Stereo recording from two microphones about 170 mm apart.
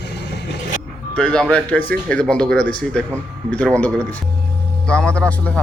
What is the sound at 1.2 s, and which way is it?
Speech, 5° left (ahead or behind).